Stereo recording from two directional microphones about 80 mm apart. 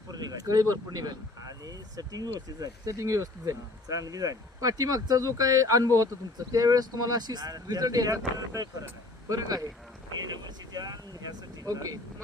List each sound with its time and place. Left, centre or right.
0.1 s speech: right
10.2 s vehicle: right
11.7 s speech: right